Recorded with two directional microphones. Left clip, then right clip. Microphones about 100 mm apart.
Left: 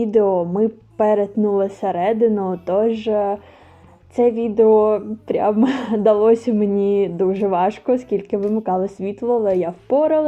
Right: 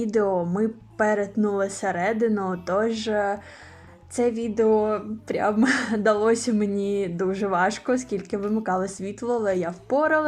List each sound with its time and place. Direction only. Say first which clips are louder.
0.0 s a woman's voice: left 7 dB; 40° left (ahead or behind)
4.1 s a woman's voice: left 7 dB; 45° left (ahead or behind)
8.4 s speech: left 6 dB; centre (ahead or behind)
8.6 s a woman's voice: left 5 dB; 40° left (ahead or behind)